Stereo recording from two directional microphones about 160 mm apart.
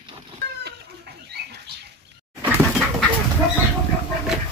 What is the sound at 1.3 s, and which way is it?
Rodents, 90° right.